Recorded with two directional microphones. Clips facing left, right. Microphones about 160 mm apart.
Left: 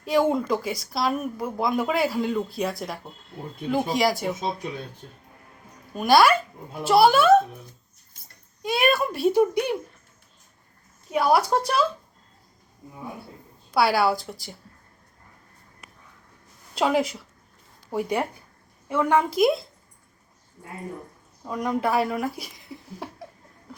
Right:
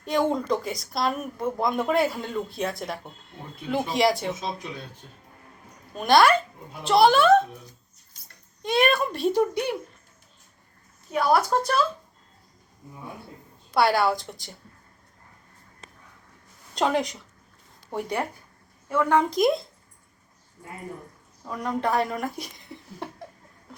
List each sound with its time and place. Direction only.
0.0 s speech: 5° left (ahead or behind)
5.9 s a child's voice: 5° left (ahead or behind)
8.6 s a child's voice: 5° left (ahead or behind)
11.1 s a child's voice: 10° left (ahead or behind)
13.7 s speech: 5° left (ahead or behind)
16.7 s a child's voice: 5° left (ahead or behind)
19.3 s speech: 5° left (ahead or behind)
21.4 s speech: 15° left (ahead or behind)